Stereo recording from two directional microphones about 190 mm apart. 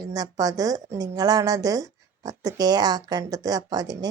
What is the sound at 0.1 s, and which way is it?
Speech, 20° right (ahead or behind).